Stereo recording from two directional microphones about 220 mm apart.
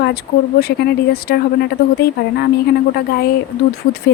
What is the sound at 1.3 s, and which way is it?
Speech, 45° left (ahead or behind).